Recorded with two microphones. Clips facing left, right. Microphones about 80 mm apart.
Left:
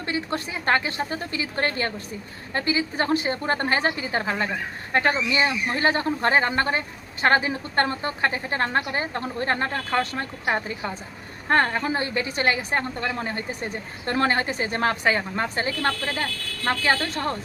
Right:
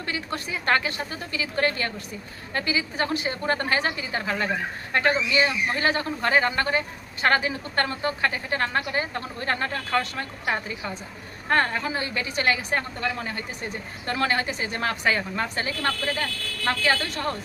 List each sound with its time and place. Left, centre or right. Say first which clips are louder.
0.0 s a woman's voice: left 3 dB; left